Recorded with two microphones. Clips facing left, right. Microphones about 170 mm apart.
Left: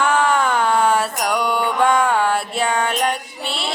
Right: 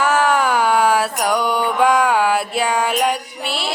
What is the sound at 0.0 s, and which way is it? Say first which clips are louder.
Mantra: right 1 dB; 5° right (ahead or behind).